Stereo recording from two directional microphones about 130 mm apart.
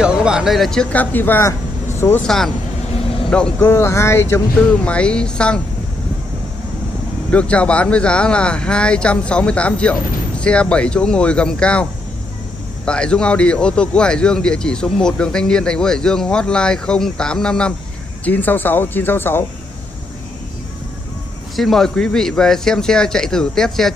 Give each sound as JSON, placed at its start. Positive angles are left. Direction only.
{"t": 0.0, "sound": "speech", "side_deg": -5}
{"t": 2.2, "sound": "a man's voice", "side_deg": 5}
{"t": 7.2, "sound": "a man's voice", "side_deg": 10}
{"t": 21.5, "sound": "a man's voice", "side_deg": 0}